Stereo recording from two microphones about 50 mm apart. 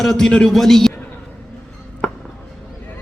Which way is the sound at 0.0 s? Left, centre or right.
Centre.